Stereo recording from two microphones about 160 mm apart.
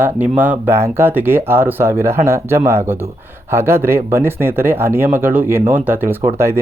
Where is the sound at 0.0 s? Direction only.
10° right (ahead or behind).